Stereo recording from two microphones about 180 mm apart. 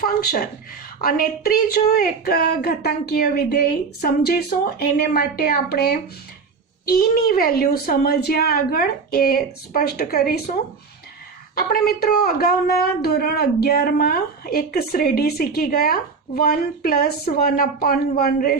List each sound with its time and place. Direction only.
0.0 s speech: 55° left (ahead or behind)
11.5 s speech: 55° left (ahead or behind)